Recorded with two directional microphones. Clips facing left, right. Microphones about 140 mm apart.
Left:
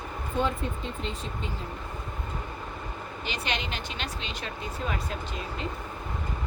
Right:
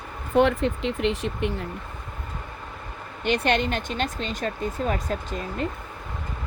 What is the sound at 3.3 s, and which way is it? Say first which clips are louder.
Speech: right 11 dB; 55° right (ahead or behind).